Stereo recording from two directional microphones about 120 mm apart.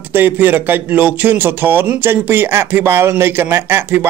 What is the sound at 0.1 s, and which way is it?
A man's voice, 15° right (ahead or behind).